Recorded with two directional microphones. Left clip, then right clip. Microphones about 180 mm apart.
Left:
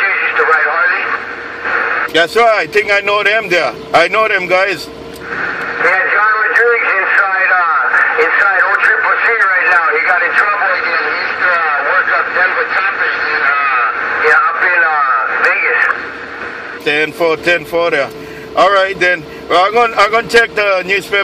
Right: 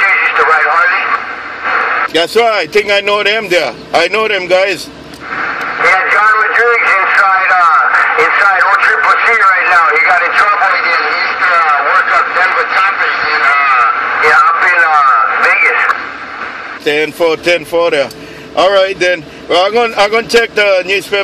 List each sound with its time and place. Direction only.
0.0 s radio: 45° right (ahead or behind)
2.1 s speech: 30° right (ahead or behind)
5.3 s radio: 45° right (ahead or behind)
16.8 s a man's voice: 30° right (ahead or behind)